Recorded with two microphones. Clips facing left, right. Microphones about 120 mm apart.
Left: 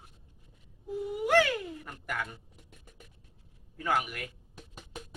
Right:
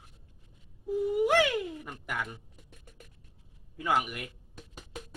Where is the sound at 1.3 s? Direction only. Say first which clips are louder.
Even; 10° right (ahead or behind).